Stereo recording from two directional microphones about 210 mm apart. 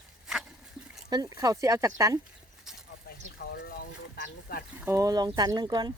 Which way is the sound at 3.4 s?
50° left (ahead or behind).